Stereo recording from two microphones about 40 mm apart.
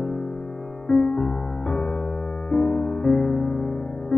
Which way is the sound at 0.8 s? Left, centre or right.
Centre.